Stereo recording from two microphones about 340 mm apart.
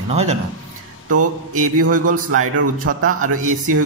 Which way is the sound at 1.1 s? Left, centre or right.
Right.